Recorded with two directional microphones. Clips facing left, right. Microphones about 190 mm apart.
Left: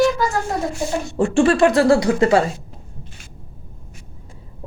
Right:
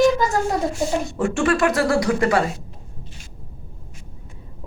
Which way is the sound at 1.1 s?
30° left (ahead or behind).